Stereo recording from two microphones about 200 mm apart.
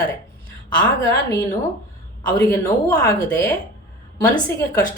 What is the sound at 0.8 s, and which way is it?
A woman's voice, 15° left (ahead or behind).